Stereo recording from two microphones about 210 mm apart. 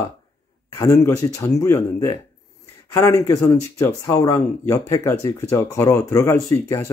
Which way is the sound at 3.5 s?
15° left (ahead or behind).